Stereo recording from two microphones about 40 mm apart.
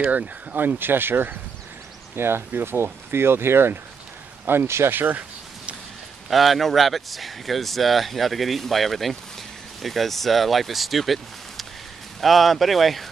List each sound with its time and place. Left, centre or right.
0.1 s speech: right
0.6 s speech: right
2.1 s speech: right
6.3 s speech: centre